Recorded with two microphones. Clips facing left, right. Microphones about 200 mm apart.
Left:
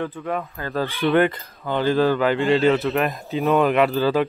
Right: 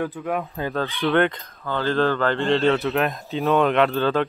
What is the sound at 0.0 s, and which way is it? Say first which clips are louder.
Speech: right 1 dB; 10° right (ahead or behind).